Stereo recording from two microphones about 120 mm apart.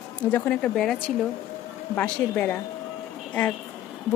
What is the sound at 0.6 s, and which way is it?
Speech, 5° left (ahead or behind).